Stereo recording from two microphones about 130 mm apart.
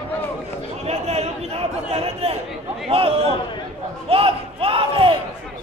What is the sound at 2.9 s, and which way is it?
Speech, 45° right (ahead or behind).